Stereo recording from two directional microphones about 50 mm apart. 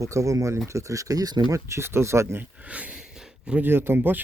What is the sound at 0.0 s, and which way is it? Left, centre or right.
Speech, right.